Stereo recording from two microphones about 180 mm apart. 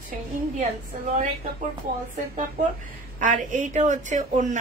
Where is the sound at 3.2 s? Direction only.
45° right (ahead or behind).